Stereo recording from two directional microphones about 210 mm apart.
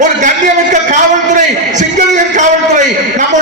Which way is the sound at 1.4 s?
35° right (ahead or behind).